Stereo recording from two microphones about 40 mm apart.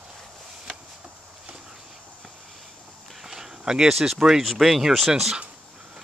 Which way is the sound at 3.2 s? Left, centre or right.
Centre.